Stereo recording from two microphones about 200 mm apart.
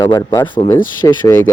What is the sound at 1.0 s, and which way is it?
Speech, 10° left (ahead or behind).